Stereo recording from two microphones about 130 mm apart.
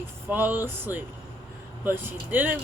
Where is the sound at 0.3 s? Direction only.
15° right (ahead or behind).